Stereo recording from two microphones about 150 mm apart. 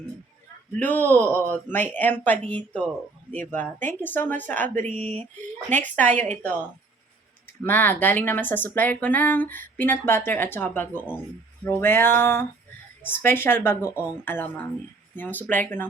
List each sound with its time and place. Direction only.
0.8 s speech: 10° left (ahead or behind)
3.8 s speech: 10° left (ahead or behind)
7.6 s speech: 15° left (ahead or behind)